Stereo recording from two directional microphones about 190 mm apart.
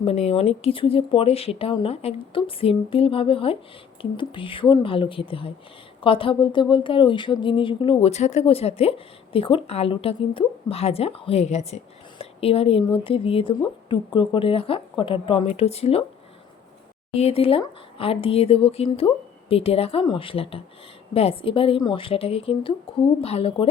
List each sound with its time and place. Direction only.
0.0 s speech: 30° left (ahead or behind)
17.2 s speech: 30° left (ahead or behind)